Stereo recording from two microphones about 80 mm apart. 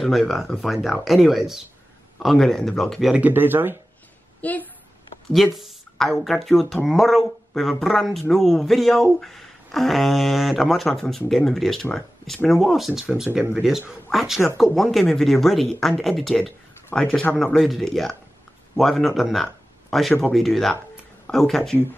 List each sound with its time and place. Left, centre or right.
0.0 s speech: centre
2.1 s speech: centre
3.2 s speech: right
4.4 s a woman's voice: centre
5.6 s a sound: centre
6.2 s speech: centre
19.4 s a sound: centre
20.3 s speech: centre